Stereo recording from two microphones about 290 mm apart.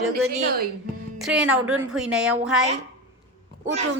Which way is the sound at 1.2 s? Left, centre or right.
Centre.